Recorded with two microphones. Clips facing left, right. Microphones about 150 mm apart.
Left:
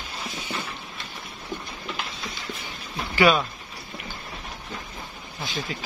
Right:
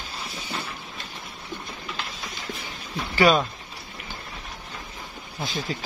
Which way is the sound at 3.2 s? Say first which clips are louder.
Right 1 dB; 40° right (ahead or behind).